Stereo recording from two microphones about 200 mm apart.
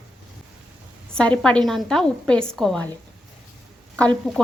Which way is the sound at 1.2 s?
5° left (ahead or behind).